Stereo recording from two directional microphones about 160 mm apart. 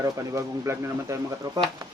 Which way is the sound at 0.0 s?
20° right (ahead or behind).